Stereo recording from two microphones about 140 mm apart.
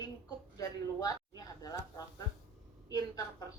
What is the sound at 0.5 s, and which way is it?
Speech, 25° left (ahead or behind).